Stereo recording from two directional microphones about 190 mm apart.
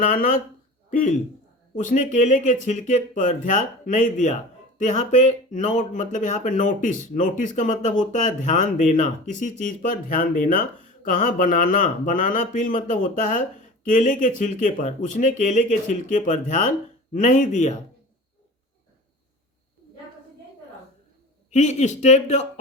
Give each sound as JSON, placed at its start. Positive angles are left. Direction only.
{"t": 0.0, "sound": "a man's voice", "side_deg": 45}
{"t": 21.5, "sound": "speech", "side_deg": 35}